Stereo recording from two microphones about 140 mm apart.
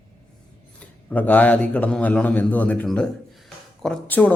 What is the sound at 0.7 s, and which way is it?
Speech, 10° left (ahead or behind).